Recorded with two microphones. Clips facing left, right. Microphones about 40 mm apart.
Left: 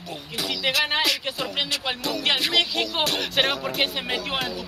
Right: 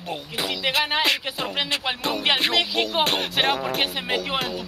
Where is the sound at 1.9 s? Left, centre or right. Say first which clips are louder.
Right 2 dB; centre.